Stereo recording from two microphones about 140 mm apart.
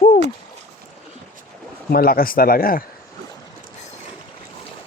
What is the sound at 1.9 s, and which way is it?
Speech, 90° left.